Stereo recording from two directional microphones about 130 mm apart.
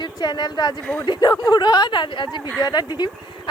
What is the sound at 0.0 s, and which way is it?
Speech, 35° left (ahead or behind).